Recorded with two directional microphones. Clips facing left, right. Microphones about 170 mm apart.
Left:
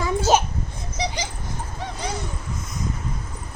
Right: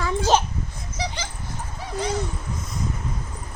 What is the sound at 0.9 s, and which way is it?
Dog, 15° left (ahead or behind).